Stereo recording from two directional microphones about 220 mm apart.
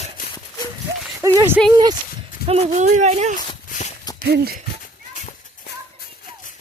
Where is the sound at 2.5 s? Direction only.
30° right (ahead or behind).